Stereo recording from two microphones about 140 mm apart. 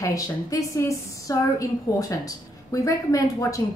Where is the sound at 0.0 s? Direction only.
25° left (ahead or behind).